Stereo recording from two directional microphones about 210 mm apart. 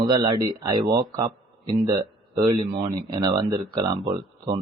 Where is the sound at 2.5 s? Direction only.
30° right (ahead or behind).